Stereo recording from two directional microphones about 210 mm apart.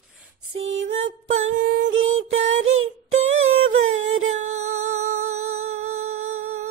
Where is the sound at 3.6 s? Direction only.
75° right (ahead or behind).